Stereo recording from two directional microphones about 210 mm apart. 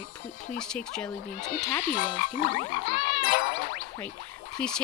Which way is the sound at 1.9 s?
40° left (ahead or behind).